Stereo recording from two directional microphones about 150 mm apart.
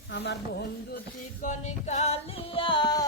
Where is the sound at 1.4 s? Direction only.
50° left (ahead or behind); by 3.0 s 30° left (ahead or behind).